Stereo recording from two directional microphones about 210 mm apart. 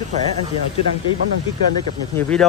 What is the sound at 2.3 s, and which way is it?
Speech, 5° left (ahead or behind).